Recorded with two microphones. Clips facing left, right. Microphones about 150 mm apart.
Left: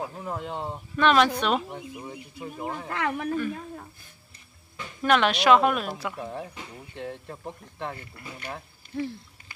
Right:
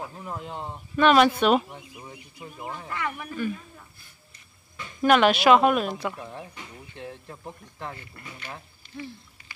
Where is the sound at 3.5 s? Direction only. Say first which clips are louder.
Left 5 dB; 60° left (ahead or behind).